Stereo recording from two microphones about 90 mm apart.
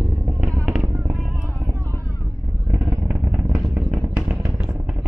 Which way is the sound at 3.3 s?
30° right (ahead or behind).